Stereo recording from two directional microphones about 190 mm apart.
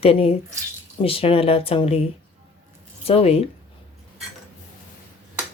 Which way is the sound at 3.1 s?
30° left (ahead or behind).